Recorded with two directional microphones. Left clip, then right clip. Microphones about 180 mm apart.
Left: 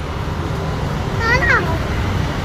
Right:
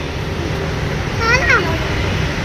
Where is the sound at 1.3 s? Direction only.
50° right (ahead or behind).